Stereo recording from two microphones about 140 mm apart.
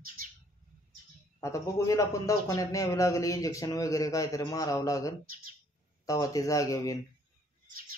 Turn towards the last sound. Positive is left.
turn(degrees=25)  # may be behind; listen again after turning